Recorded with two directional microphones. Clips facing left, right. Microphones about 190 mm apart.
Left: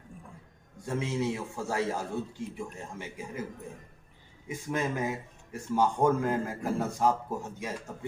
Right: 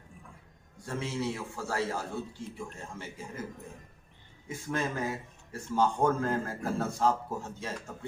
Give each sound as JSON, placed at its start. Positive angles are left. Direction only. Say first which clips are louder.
{"t": 0.9, "sound": "a man's voice", "louder": "left 3 dB", "side_deg": 20}
{"t": 4.4, "sound": "speech", "louder": "left 2 dB", "side_deg": 20}